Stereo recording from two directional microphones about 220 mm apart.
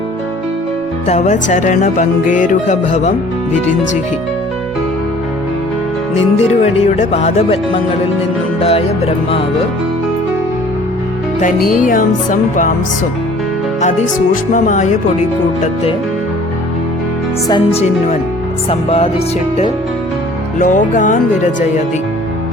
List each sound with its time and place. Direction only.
1.0 s music: 30° left (ahead or behind)
6.3 s music: 30° left (ahead or behind)
8.6 s music: 30° left (ahead or behind)
11.3 s music: 35° left (ahead or behind)
14.5 s music: 35° left (ahead or behind)
17.5 s music: 25° left (ahead or behind)
20.6 s music: 35° left (ahead or behind)